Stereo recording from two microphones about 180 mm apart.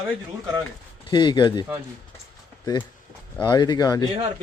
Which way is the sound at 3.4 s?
25° left (ahead or behind).